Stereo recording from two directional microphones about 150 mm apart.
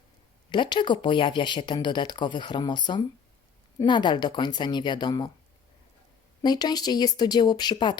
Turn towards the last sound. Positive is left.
turn(degrees=30)  # may be behind; listen again after turning